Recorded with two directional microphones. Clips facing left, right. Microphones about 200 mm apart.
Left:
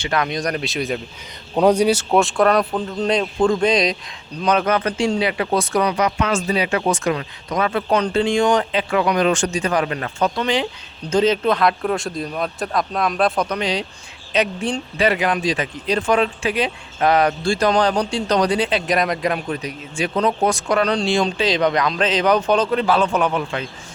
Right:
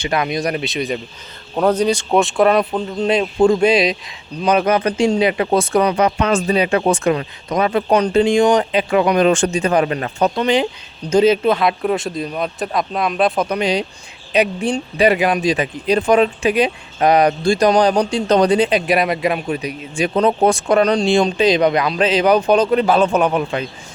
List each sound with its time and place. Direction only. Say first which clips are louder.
0.0 s speech: right 2 dB; 10° right (ahead or behind)
1.5 s speech: left 1 dB; 10° left (ahead or behind); by 18.0 s 15° right (ahead or behind)
18.1 s speech: right 5 dB; 25° right (ahead or behind)
18.9 s speech: right 3 dB; 5° right (ahead or behind)
20.1 s speech: right 4 dB; 30° right (ahead or behind)